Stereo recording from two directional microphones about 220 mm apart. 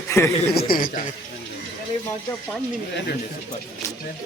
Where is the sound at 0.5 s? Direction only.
40° left (ahead or behind).